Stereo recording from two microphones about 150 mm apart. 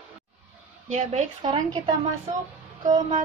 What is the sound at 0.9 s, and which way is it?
Speech, 50° right (ahead or behind).